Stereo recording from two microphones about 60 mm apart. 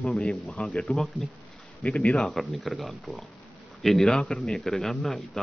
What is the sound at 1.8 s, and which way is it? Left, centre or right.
Speech, centre.